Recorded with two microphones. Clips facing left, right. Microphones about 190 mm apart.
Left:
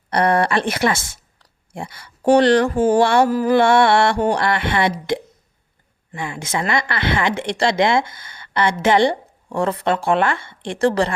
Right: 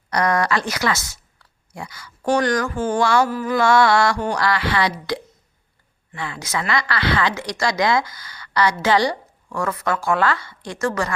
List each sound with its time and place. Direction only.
0.1 s speech: 30° left (ahead or behind)